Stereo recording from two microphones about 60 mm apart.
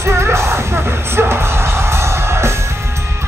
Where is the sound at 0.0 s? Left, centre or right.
Right.